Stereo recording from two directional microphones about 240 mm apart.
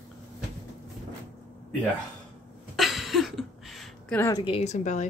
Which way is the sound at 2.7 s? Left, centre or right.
Centre.